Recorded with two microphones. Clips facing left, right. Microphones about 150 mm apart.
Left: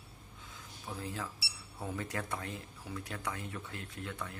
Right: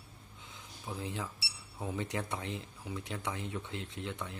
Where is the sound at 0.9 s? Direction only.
20° right (ahead or behind).